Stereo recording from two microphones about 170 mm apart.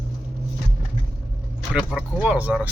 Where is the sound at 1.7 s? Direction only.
5° right (ahead or behind).